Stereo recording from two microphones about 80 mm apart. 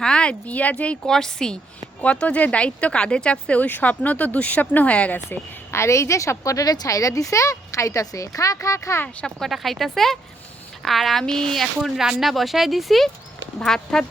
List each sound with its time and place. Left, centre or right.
0.0 s a woman's voice: centre
5.7 s speech: left
9.2 s speech: centre